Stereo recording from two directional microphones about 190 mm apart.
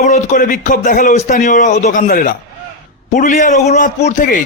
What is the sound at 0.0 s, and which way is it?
A man's voice, 40° left (ahead or behind).